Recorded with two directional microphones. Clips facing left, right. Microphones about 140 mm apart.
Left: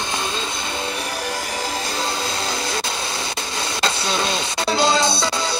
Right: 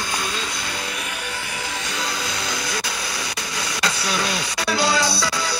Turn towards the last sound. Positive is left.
turn(degrees=25)  # may be behind; listen again after turning